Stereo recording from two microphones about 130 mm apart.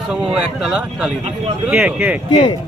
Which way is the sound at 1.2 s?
50° right (ahead or behind).